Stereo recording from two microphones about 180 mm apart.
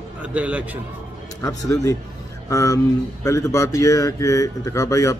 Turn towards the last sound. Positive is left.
turn(degrees=20)  # may be behind; listen again after turning